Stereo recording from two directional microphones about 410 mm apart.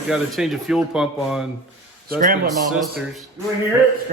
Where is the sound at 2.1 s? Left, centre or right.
Centre.